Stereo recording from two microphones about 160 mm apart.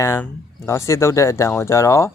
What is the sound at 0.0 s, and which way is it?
Speech, 15° left (ahead or behind).